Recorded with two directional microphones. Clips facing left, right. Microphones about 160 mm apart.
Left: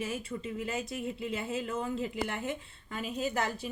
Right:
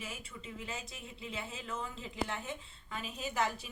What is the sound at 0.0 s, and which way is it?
Speech, 65° left (ahead or behind).